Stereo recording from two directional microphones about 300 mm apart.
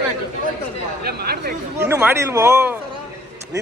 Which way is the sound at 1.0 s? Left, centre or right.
Right.